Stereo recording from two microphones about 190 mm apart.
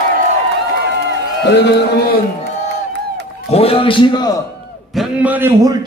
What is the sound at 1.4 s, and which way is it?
Speech, 60° left (ahead or behind).